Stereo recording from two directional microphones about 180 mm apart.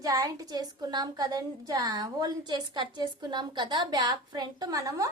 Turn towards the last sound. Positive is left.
turn(degrees=-20)  # may be behind; listen again after turning